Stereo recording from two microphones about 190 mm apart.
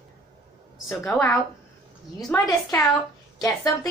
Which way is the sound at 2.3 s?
15° left (ahead or behind).